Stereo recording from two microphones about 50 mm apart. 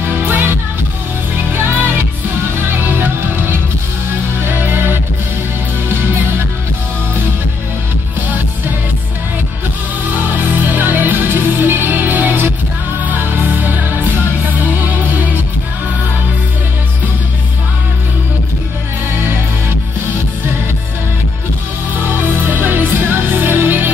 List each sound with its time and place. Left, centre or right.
0.0 s music: right
10.0 s music: right
21.9 s music: right